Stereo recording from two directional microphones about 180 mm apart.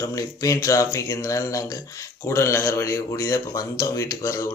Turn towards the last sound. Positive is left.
turn(degrees=15)  # may be behind; listen again after turning